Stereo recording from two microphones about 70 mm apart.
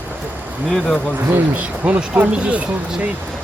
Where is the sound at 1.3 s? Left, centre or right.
Right.